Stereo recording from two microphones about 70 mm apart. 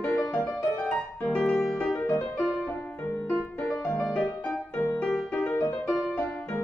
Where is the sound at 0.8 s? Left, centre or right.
Centre.